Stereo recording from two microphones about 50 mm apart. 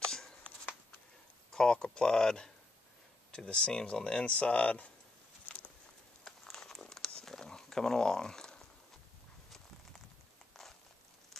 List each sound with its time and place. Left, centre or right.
0.1 s a sound: centre
1.5 s speech: centre
6.2 s crumpling: centre